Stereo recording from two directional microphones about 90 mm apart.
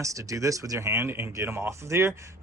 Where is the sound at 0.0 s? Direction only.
35° right (ahead or behind).